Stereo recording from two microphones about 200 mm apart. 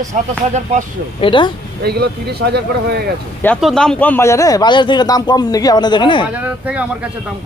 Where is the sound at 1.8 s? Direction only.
50° right (ahead or behind).